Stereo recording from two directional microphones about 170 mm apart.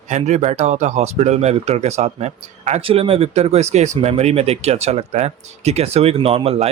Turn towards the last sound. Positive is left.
turn(degrees=-35)  # may be behind; listen again after turning